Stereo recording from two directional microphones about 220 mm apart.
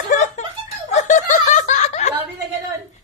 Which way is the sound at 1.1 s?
35° left (ahead or behind).